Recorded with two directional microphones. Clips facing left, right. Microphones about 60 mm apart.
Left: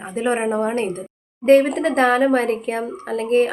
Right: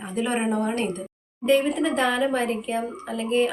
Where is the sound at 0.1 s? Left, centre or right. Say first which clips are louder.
Left 4 dB; left.